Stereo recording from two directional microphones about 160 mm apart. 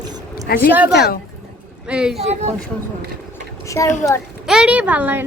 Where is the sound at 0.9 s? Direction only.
90° left.